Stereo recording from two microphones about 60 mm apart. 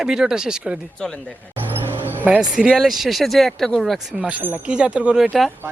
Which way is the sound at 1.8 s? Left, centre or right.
Right.